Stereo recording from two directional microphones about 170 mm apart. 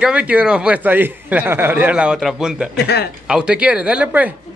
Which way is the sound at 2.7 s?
70° left (ahead or behind).